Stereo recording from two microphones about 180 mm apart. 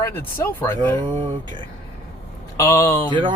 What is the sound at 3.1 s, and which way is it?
Speech, 25° right (ahead or behind).